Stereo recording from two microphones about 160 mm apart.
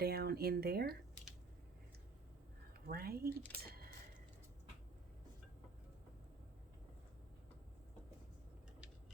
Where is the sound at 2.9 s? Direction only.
70° right (ahead or behind).